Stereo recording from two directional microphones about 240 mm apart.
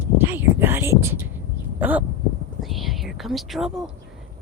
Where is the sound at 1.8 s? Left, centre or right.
Centre.